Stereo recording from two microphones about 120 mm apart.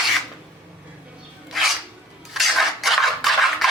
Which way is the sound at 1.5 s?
Centre (ahead or behind).